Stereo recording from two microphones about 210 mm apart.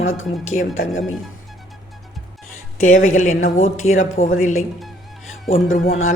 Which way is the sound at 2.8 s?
35° left (ahead or behind).